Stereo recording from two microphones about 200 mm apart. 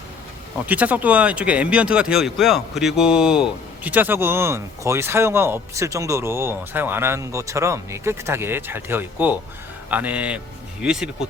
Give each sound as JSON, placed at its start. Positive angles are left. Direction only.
{"t": 0.6, "sound": "speech", "side_deg": -10}